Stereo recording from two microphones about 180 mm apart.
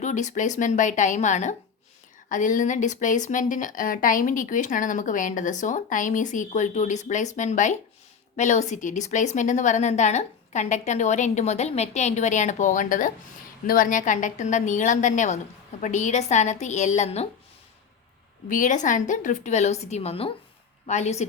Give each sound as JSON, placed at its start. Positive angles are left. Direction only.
{"t": 0.0, "sound": "a woman's voice", "side_deg": 40}
{"t": 18.4, "sound": "a woman's voice", "side_deg": 45}